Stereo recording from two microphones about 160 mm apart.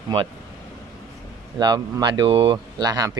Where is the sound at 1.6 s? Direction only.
25° right (ahead or behind).